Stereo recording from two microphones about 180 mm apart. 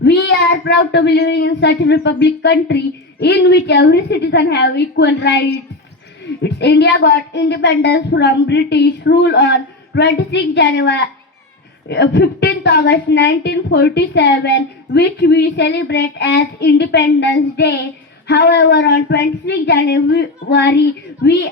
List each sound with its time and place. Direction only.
0.0 s a woman's voice: 75° left (ahead or behind)
6.4 s a woman's voice: 70° left (ahead or behind)